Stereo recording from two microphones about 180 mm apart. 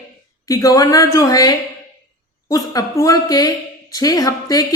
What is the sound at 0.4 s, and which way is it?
Speech, 20° left (ahead or behind).